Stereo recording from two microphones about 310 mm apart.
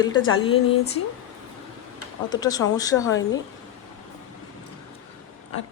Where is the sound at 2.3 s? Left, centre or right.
Centre.